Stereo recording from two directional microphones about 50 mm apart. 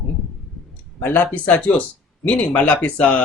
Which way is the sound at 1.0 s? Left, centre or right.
Left.